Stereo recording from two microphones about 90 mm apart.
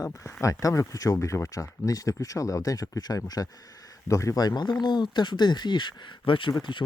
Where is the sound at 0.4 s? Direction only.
35° left (ahead or behind).